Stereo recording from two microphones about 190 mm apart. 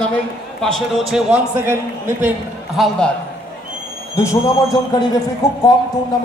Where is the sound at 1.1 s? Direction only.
5° right (ahead or behind).